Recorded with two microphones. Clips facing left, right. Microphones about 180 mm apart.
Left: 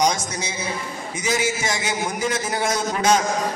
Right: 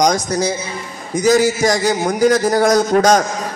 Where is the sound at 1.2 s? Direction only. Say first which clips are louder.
Right 11 dB; 40° right (ahead or behind).